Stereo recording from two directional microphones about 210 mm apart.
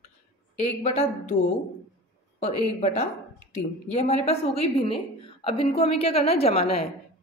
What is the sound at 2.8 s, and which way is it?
A woman's voice, 30° left (ahead or behind).